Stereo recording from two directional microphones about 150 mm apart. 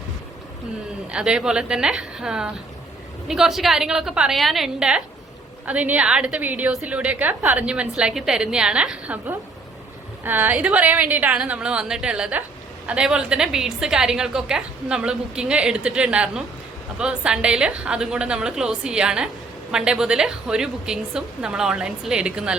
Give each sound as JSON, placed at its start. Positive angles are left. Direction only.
{"t": 1.1, "sound": "a woman's voice", "side_deg": -5}